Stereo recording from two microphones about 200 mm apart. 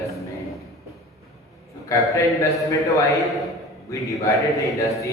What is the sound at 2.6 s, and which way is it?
A man's voice, 15° left (ahead or behind).